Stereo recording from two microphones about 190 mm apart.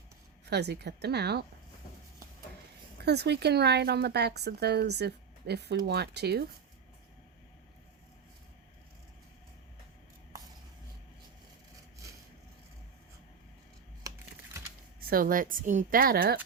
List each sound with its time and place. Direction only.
0.4 s speech: 60° right (ahead or behind)
3.0 s speech: 60° right (ahead or behind)
15.1 s speech: 50° right (ahead or behind)